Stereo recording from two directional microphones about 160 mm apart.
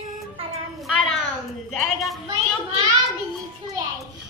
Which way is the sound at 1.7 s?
Centre (ahead or behind).